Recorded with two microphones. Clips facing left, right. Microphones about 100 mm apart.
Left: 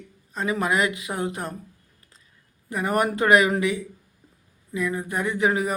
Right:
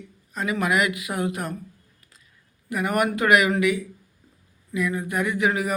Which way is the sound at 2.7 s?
30° left (ahead or behind).